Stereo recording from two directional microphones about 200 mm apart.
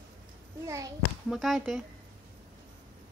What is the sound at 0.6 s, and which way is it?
Speech, 15° right (ahead or behind).